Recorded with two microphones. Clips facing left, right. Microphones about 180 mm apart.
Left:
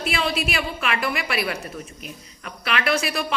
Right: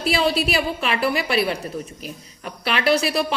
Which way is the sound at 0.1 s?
35° right (ahead or behind).